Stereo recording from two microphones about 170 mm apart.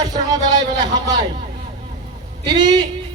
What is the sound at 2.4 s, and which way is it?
Speech, 25° right (ahead or behind).